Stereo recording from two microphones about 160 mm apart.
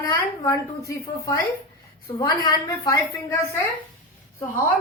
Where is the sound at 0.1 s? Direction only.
20° left (ahead or behind).